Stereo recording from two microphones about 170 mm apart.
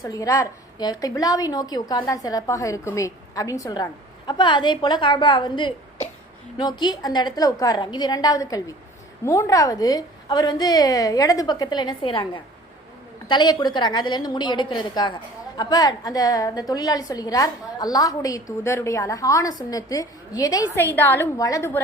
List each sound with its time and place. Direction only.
0.0 s a woman's voice: 20° left (ahead or behind)